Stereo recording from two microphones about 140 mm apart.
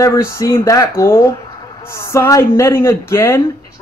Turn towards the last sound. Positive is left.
turn(degrees=20)  # may be behind; listen again after turning